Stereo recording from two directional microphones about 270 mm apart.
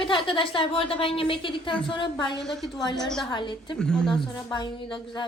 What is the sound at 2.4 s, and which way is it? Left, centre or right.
Speech, centre.